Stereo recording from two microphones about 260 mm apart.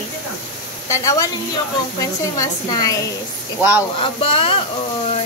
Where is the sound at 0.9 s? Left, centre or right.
Centre.